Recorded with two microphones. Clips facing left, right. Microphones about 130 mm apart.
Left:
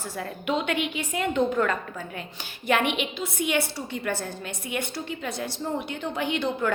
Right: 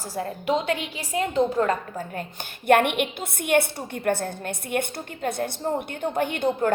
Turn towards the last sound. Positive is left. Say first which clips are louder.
# right 3 dB
turn(degrees=-50)  # may be behind; listen again after turning